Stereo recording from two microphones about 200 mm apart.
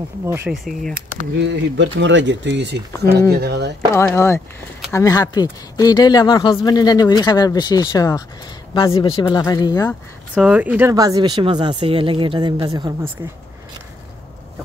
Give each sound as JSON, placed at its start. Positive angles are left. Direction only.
{"t": 0.3, "sound": "speech", "side_deg": -5}
{"t": 1.3, "sound": "speech", "side_deg": -60}
{"t": 3.9, "sound": "speech", "side_deg": 15}
{"t": 10.3, "sound": "speech", "side_deg": -5}